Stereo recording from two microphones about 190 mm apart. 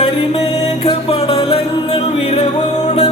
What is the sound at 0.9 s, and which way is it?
Music, 30° left (ahead or behind).